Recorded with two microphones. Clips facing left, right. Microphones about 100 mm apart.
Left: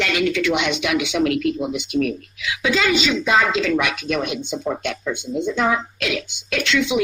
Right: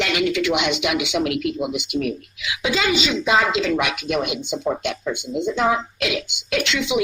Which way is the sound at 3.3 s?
25° right (ahead or behind).